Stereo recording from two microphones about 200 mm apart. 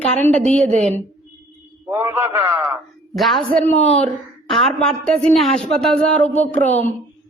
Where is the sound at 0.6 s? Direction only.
35° right (ahead or behind).